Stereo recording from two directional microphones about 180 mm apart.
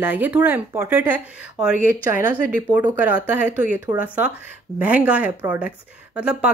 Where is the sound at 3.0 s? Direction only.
10° right (ahead or behind).